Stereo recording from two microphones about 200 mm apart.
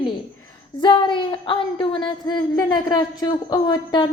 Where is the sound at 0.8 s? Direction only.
25° left (ahead or behind).